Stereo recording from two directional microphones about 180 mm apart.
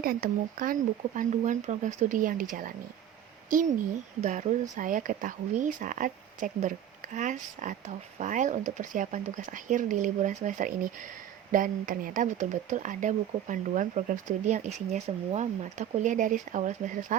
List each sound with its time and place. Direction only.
0.0 s speech: 55° right (ahead or behind)